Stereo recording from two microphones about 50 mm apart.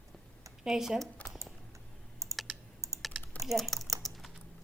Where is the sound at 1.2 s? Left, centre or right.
Left.